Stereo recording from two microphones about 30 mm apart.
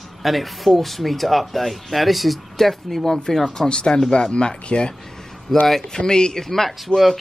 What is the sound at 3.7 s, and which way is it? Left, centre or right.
Speech, left.